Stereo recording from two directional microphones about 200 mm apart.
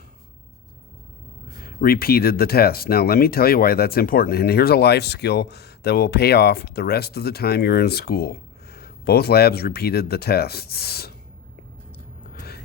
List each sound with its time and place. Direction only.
1.5 s speech: 45° left (ahead or behind)